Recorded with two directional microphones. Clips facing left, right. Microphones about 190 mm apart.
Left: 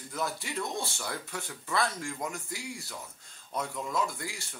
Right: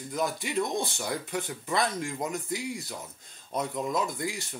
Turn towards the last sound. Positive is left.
turn(degrees=-20)  # may be behind; listen again after turning